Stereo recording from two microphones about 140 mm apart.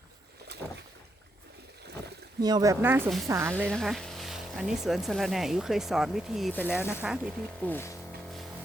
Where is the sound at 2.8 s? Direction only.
15° right (ahead or behind).